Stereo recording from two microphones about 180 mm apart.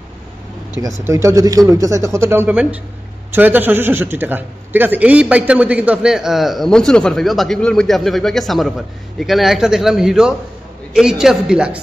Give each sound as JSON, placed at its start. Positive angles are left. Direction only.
{"t": 1.0, "sound": "a man's voice", "side_deg": -15}